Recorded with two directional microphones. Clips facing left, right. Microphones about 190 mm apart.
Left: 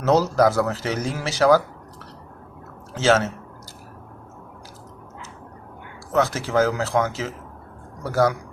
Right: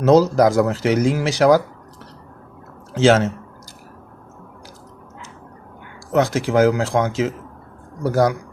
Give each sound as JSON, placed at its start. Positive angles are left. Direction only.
{"t": 0.0, "sound": "speech", "side_deg": -10}
{"t": 2.9, "sound": "speech", "side_deg": -15}
{"t": 6.1, "sound": "speech", "side_deg": -15}